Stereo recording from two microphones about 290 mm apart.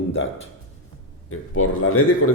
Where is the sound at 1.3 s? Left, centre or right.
Left.